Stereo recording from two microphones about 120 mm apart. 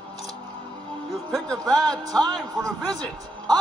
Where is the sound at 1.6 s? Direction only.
30° right (ahead or behind).